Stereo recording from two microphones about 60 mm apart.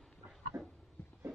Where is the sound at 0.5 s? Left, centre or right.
Right.